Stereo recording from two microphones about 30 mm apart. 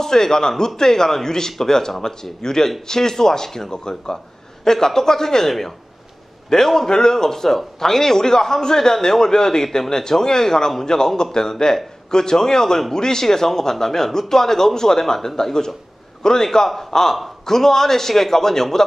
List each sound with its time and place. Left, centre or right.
0.0 s a man's voice: centre